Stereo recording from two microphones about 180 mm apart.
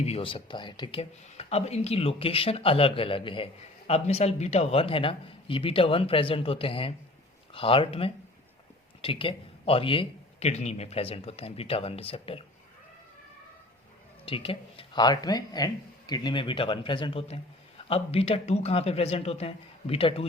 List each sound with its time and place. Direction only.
0.0 s speech: 30° left (ahead or behind)
14.3 s speech: 30° left (ahead or behind)